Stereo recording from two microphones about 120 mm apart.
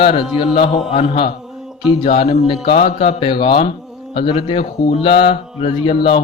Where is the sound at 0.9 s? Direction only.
65° left (ahead or behind).